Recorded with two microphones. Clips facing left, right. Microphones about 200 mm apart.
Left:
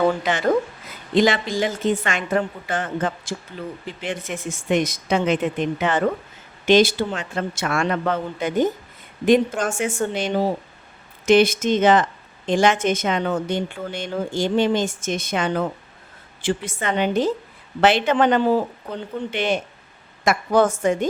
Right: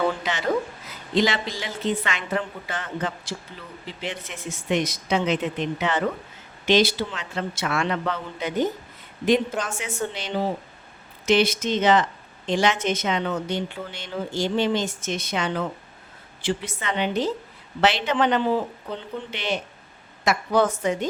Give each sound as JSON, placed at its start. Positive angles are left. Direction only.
{"t": 0.2, "sound": "speech", "side_deg": 50}